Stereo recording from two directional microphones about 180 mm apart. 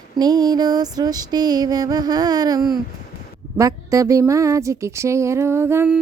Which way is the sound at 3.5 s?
20° right (ahead or behind).